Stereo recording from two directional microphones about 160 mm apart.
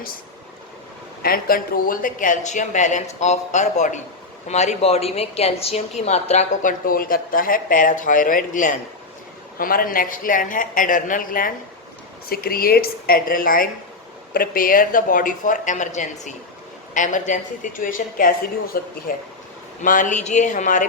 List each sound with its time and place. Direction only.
1.2 s a woman's voice: 65° left (ahead or behind)
12.3 s a woman's voice: 70° left (ahead or behind); by 20.8 s 50° left (ahead or behind)